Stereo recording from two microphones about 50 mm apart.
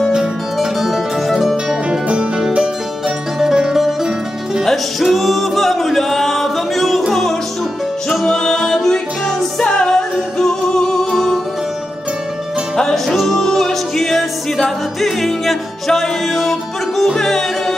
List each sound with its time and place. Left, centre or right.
0.1 s music: centre
1.9 s music: centre
12.7 s music: centre